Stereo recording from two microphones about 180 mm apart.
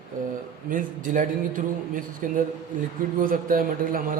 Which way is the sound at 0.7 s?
50° right (ahead or behind).